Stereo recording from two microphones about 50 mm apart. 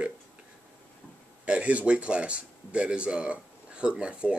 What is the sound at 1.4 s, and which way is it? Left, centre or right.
Speech, right.